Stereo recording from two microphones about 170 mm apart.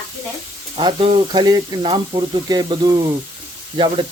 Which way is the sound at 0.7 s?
25° right (ahead or behind).